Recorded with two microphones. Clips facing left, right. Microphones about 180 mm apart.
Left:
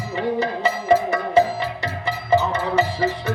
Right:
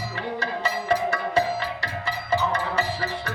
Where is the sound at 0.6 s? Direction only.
15° left (ahead or behind).